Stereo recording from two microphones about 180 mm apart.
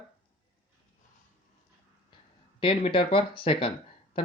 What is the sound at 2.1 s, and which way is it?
Speech, 30° left (ahead or behind).